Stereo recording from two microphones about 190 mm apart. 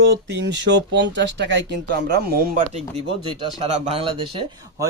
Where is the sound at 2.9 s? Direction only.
30° right (ahead or behind).